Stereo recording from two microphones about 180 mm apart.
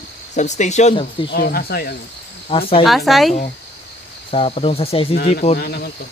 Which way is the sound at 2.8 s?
Centre (ahead or behind).